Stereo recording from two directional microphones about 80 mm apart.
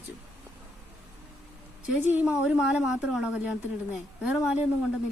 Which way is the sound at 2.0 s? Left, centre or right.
Right.